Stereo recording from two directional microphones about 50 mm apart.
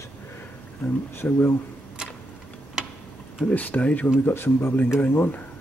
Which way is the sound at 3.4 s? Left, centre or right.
Left.